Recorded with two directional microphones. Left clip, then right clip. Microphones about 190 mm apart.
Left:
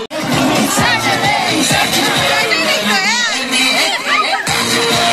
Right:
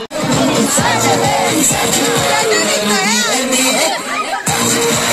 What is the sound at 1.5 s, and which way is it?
Speech, 50° right (ahead or behind).